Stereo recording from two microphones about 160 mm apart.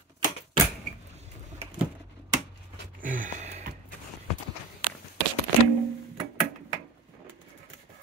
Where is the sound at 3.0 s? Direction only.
55° right (ahead or behind).